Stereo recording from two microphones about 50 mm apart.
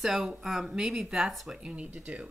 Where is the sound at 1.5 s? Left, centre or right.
Right.